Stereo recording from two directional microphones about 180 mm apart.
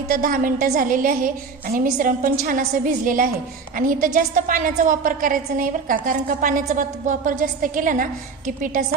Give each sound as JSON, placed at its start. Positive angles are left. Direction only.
{"t": 0.1, "sound": "a woman's voice", "side_deg": -50}